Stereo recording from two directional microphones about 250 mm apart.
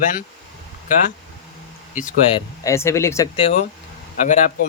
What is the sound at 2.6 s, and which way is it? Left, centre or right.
A man's voice, centre.